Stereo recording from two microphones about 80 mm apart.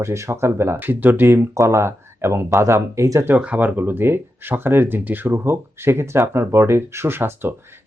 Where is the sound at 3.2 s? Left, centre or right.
Centre.